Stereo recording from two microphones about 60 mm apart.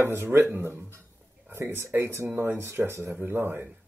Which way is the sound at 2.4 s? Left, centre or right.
Right.